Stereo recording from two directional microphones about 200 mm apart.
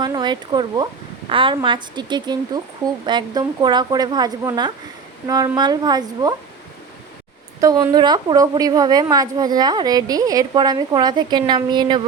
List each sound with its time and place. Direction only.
0.0 s a woman's voice: 20° right (ahead or behind)
7.6 s a woman's voice: 20° right (ahead or behind)